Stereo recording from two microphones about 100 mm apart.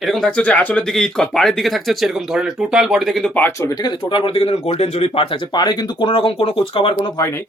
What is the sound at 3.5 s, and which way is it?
Speech, 30° left (ahead or behind).